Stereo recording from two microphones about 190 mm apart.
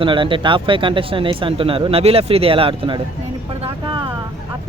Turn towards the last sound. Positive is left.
turn(degrees=-25)  # may be behind; listen again after turning